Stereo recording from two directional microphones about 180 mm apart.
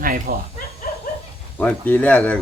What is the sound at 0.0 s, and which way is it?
Speech, 50° right (ahead or behind).